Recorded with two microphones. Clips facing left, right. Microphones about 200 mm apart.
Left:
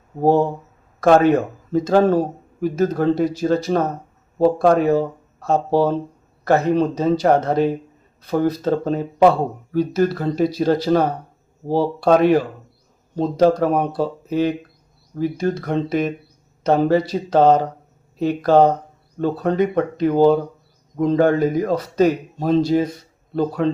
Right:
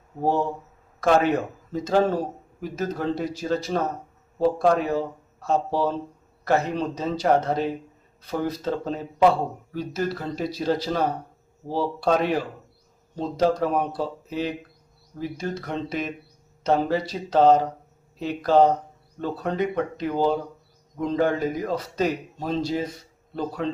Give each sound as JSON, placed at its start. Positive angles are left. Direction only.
{"t": 0.2, "sound": "a man's voice", "side_deg": 50}